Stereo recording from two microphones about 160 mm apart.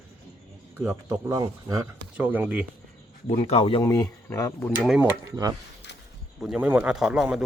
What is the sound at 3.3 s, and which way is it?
Speech, 35° left (ahead or behind).